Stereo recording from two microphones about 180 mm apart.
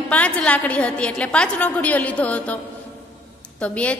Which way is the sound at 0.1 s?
10° left (ahead or behind).